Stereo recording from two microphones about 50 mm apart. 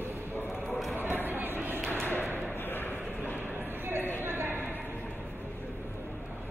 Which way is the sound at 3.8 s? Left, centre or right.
Right.